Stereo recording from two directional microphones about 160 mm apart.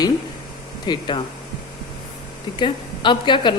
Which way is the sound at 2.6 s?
30° left (ahead or behind).